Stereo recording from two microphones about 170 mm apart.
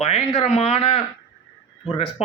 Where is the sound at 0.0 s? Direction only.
35° left (ahead or behind).